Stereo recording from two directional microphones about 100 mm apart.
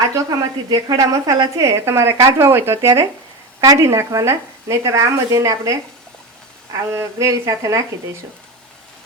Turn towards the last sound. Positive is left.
turn(degrees=-30)  # may be behind; listen again after turning